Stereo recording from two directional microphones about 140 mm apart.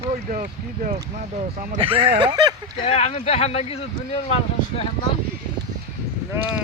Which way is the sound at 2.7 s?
40° left (ahead or behind).